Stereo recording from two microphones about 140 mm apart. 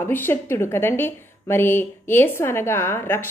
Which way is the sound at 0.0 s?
15° left (ahead or behind).